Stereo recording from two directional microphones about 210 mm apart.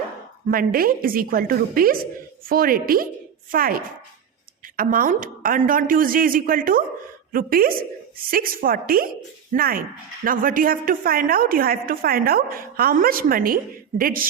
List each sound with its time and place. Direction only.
0.4 s a woman's voice: 45° right (ahead or behind)